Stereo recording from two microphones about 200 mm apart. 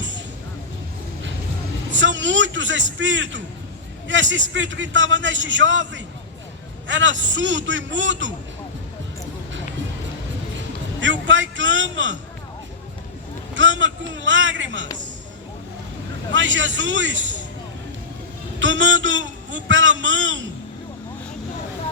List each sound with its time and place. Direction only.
2.0 s a man's voice: 70° right (ahead or behind)
11.0 s a man's voice: 70° right (ahead or behind)
13.5 s a man's voice: 70° right (ahead or behind)
16.3 s a man's voice: 70° right (ahead or behind)
18.6 s a man's voice: 70° right (ahead or behind)